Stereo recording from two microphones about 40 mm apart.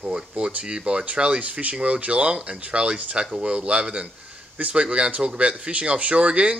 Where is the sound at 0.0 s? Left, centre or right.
Right.